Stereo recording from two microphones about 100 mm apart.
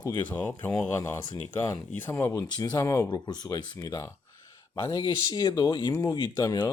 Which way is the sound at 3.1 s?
45° left (ahead or behind).